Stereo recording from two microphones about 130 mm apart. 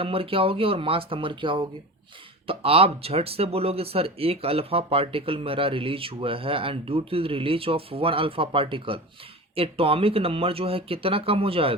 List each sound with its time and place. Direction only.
0.0 s speech: 45° right (ahead or behind)